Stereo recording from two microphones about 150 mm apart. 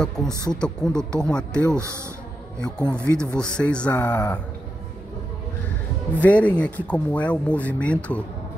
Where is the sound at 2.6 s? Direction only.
5° left (ahead or behind).